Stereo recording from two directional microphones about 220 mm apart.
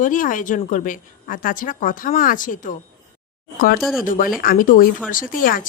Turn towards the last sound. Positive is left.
turn(degrees=40)  # may be behind; listen again after turning